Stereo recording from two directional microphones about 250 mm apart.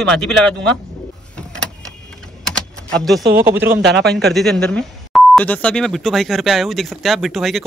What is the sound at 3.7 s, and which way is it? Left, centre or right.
Speech, right.